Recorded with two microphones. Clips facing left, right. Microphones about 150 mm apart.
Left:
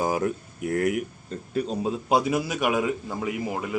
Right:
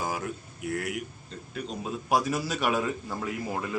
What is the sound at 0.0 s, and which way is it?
Speech, 45° left (ahead or behind).